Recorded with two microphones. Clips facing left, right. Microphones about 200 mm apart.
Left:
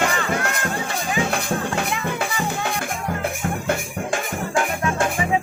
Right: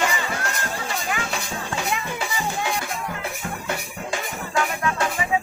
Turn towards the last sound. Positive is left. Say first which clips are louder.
# left 2 dB
turn(degrees=50)  # may be behind; listen again after turning